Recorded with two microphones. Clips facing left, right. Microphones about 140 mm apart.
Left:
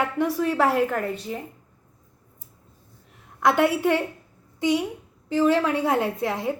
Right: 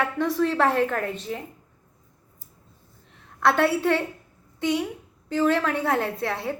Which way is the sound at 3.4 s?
15° left (ahead or behind).